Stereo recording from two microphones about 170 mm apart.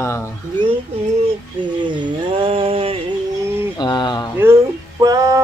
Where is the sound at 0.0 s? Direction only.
15° left (ahead or behind).